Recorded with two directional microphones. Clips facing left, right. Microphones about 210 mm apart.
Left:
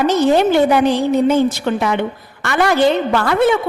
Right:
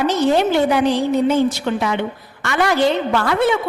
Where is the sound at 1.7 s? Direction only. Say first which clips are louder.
Left 2 dB; 55° left (ahead or behind).